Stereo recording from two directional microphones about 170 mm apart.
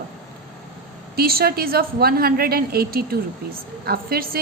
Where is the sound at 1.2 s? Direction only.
65° right (ahead or behind).